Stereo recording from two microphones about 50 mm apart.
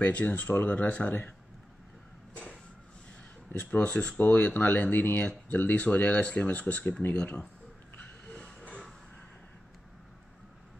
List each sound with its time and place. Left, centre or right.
0.0 s speech: left
3.8 s speech: left
4.2 s speech: left
8.3 s train: centre